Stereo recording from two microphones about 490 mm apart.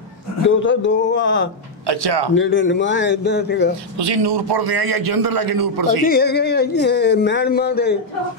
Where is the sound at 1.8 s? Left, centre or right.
Right.